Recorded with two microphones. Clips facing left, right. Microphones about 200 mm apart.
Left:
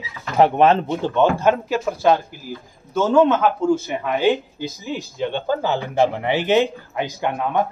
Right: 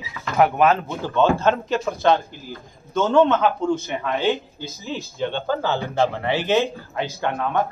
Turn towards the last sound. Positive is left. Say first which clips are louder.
# left 1 dB
turn(degrees=15)  # may be behind; listen again after turning